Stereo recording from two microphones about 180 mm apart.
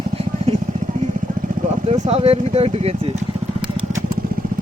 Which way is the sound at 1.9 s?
35° right (ahead or behind).